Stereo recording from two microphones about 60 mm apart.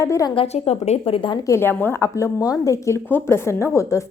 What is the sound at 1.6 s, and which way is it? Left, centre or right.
Speech, left.